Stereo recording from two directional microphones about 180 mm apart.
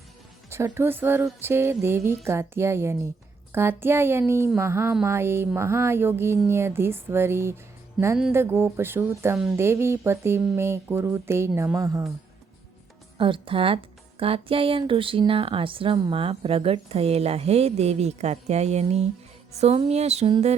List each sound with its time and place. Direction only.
0.5 s speech: 15° right (ahead or behind)
13.1 s a woman's voice: 30° right (ahead or behind)